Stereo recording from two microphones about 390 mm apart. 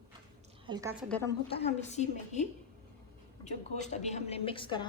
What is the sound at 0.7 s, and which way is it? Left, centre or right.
Speech, centre.